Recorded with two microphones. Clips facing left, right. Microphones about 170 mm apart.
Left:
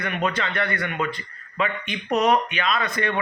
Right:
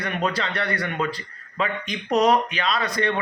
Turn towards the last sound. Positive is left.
turn(degrees=-35)  # may be behind; listen again after turning